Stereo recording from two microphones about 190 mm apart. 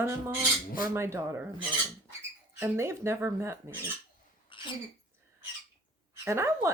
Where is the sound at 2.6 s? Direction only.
15° right (ahead or behind).